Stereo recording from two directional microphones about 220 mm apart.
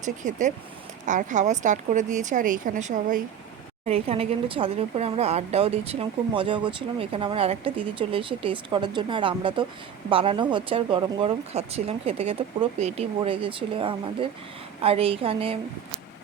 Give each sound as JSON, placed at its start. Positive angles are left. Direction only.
{"t": 0.0, "sound": "a woman's voice", "side_deg": -35}